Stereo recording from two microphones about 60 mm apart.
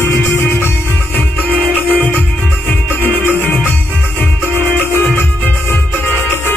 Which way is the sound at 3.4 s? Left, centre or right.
Left.